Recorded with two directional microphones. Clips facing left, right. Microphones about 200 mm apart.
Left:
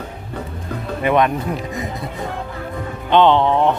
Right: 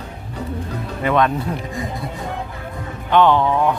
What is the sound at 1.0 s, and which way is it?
Speech, 15° left (ahead or behind).